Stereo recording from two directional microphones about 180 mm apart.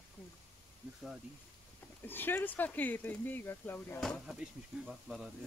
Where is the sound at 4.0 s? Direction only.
Centre (ahead or behind).